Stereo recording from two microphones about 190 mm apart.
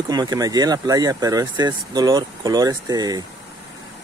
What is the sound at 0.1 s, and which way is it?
Speech, 20° right (ahead or behind).